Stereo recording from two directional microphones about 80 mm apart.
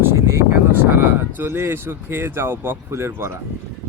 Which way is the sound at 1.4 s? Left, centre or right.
Right.